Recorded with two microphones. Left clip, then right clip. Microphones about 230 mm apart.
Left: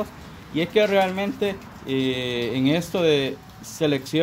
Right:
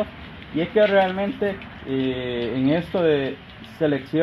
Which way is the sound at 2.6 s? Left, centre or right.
Left.